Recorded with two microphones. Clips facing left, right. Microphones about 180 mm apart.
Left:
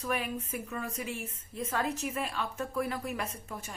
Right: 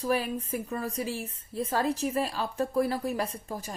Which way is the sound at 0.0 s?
35° right (ahead or behind).